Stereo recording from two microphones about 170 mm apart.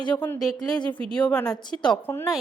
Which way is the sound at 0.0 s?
10° left (ahead or behind).